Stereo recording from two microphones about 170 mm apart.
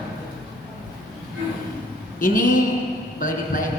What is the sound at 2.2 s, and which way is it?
A woman's voice, 50° left (ahead or behind).